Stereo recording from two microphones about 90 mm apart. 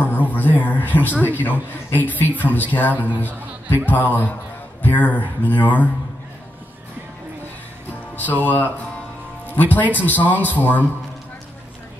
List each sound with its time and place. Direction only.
0.0 s a man's voice: 20° left (ahead or behind)
8.2 s a man's voice: 20° left (ahead or behind)